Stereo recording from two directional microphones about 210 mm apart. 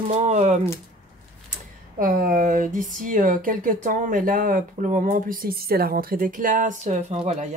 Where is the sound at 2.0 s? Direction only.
40° right (ahead or behind).